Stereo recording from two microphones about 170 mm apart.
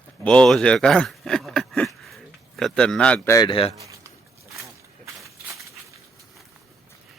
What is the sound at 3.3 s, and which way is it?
Speech, 25° left (ahead or behind).